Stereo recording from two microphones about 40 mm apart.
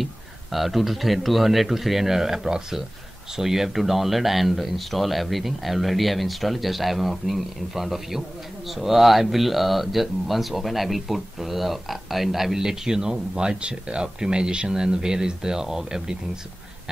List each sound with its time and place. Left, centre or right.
0.0 s speech: centre